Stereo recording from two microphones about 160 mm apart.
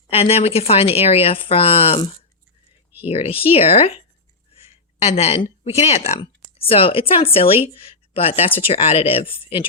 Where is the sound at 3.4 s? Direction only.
40° left (ahead or behind).